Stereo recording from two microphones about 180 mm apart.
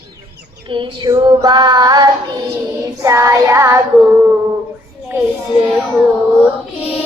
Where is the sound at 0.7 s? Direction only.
25° right (ahead or behind).